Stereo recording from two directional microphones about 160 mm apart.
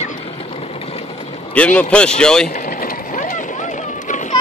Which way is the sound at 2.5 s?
60° left (ahead or behind).